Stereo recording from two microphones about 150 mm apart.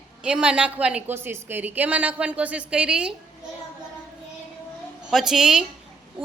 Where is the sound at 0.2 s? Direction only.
5° right (ahead or behind).